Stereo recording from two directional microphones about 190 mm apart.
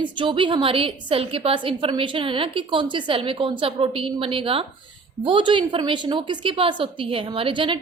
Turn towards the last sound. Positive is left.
turn(degrees=-25)  # may be behind; listen again after turning